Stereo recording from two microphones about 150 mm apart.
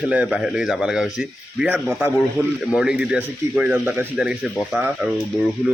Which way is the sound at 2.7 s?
5° right (ahead or behind).